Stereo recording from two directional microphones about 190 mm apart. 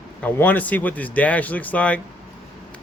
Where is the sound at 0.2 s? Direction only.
10° left (ahead or behind).